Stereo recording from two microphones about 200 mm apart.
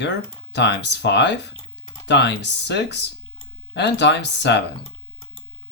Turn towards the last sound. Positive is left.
turn(degrees=60)  # may be behind; listen again after turning